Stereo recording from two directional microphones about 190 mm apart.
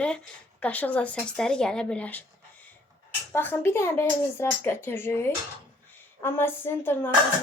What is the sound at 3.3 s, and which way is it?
Speech, 10° left (ahead or behind).